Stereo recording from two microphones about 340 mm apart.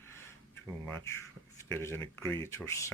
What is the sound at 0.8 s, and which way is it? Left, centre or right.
Speech, centre.